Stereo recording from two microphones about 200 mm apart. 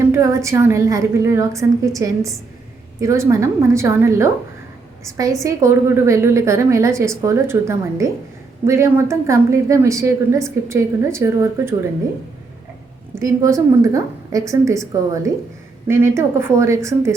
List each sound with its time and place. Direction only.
0.1 s a woman's voice: 15° right (ahead or behind)
13.1 s a woman's voice: 15° right (ahead or behind)